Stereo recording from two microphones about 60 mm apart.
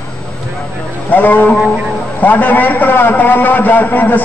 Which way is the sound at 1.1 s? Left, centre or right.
Left.